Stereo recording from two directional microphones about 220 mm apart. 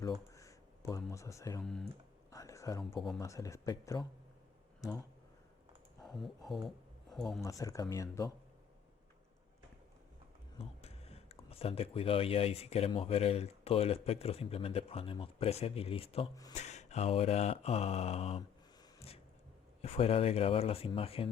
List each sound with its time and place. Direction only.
0.0 s speech: 15° left (ahead or behind)
2.3 s a sound: 15° left (ahead or behind)
2.9 s speech: centre (ahead or behind)
3.2 s speech: 15° left (ahead or behind)
6.0 s speech: centre (ahead or behind)
7.4 s speech: 15° left (ahead or behind)
10.6 s speech: 25° left (ahead or behind)
16.6 s speech: 30° left (ahead or behind)
19.8 s speech: 25° left (ahead or behind)